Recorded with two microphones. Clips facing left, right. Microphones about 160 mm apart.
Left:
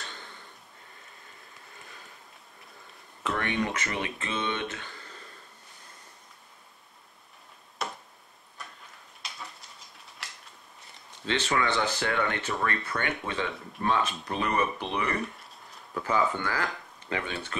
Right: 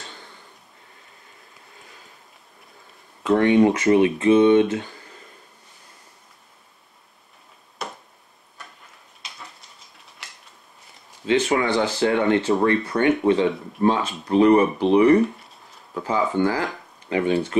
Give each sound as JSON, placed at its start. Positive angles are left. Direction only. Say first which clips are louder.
{"t": 3.3, "sound": "speech", "louder": "right 14 dB", "side_deg": -20}
{"t": 7.8, "sound": "tick-tock", "louder": "right 2 dB", "side_deg": 0}
{"t": 11.5, "sound": "speech", "louder": "right 6 dB", "side_deg": -20}
{"t": 15.3, "sound": "a sound", "louder": "right 2 dB", "side_deg": 0}
{"t": 15.9, "sound": "speech", "louder": "right 4 dB", "side_deg": -20}